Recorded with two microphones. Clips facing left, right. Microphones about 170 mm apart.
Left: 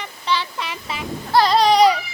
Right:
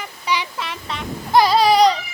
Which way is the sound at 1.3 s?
15° right (ahead or behind).